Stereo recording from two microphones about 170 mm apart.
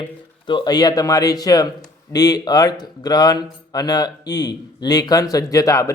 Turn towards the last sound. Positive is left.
turn(degrees=20)  # may be behind; listen again after turning